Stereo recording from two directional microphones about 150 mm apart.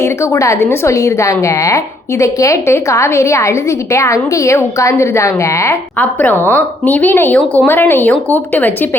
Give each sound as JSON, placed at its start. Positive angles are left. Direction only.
{"t": 0.0, "sound": "a woman's voice", "side_deg": 20}